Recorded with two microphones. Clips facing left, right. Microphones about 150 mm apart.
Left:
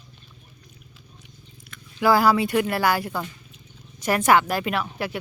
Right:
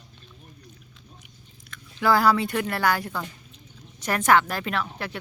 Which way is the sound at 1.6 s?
10° left (ahead or behind).